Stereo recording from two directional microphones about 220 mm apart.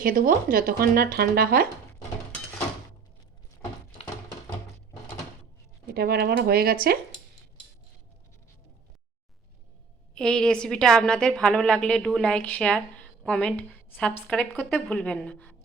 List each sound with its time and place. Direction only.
0.0 s speech: 40° right (ahead or behind)
3.6 s thunk: 20° left (ahead or behind)
5.9 s speech: 45° right (ahead or behind)
10.2 s a woman's voice: 5° left (ahead or behind)